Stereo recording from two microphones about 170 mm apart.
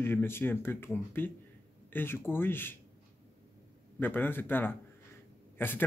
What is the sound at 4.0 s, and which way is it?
Speech, 10° left (ahead or behind).